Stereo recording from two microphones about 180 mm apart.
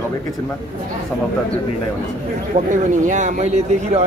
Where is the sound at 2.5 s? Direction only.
40° right (ahead or behind).